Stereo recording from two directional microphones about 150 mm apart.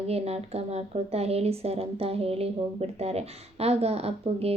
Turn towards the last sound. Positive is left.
turn(degrees=-40)  # may be behind; listen again after turning